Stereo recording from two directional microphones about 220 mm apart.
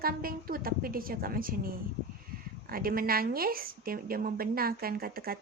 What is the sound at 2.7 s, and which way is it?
A woman's voice, 40° right (ahead or behind).